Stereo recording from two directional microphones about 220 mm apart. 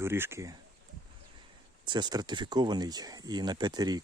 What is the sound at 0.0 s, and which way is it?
Speech, 10° right (ahead or behind).